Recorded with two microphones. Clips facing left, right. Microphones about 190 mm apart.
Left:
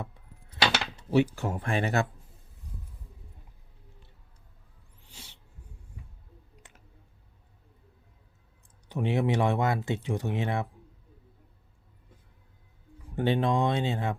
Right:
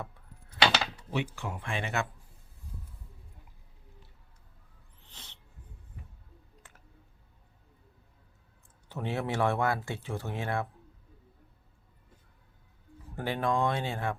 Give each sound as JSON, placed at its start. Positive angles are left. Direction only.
{"t": 1.1, "sound": "speech", "side_deg": 40}
{"t": 5.0, "sound": "snort", "side_deg": 10}
{"t": 6.6, "sound": "a sound", "side_deg": 20}
{"t": 8.9, "sound": "speech", "side_deg": 15}
{"t": 13.1, "sound": "speech", "side_deg": 25}